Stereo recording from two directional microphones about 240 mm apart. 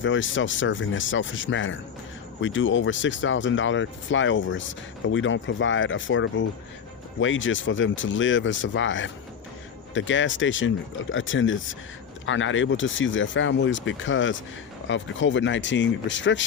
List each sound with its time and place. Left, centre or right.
0.0 s speech: left